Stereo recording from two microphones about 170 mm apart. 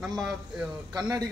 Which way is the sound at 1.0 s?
20° right (ahead or behind).